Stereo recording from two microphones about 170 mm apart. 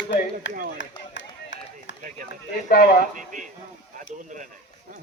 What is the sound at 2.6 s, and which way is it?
Speech, 60° left (ahead or behind).